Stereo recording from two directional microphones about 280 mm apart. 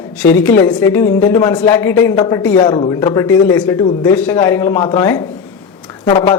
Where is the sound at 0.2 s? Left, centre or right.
Centre.